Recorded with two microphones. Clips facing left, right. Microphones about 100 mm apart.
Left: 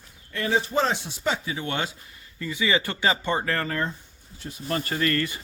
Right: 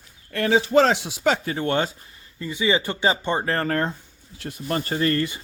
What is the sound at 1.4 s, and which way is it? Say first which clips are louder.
Speech: right 6 dB; 45° right (ahead or behind).